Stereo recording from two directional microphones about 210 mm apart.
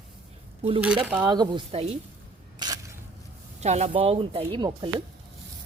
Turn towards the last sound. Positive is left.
turn(degrees=-20)  # may be behind; listen again after turning